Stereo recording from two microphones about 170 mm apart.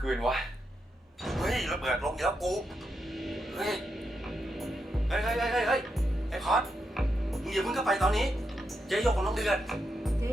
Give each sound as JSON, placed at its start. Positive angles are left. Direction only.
{"t": 0.0, "sound": "speech", "side_deg": 0}
{"t": 3.2, "sound": "music", "side_deg": 0}
{"t": 5.1, "sound": "speech", "side_deg": 0}
{"t": 6.3, "sound": "music", "side_deg": 0}
{"t": 8.9, "sound": "speech", "side_deg": 0}